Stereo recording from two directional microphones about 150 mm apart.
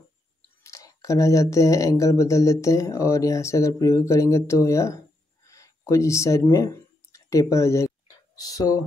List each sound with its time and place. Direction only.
0.7 s speech: 20° left (ahead or behind)
5.5 s a sound: 20° left (ahead or behind)
6.4 s speech: 20° left (ahead or behind)